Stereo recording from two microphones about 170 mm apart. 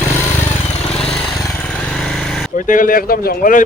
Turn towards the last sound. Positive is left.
turn(degrees=55)  # may be behind; listen again after turning